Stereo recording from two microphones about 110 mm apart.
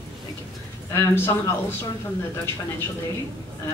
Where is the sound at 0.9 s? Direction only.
25° left (ahead or behind).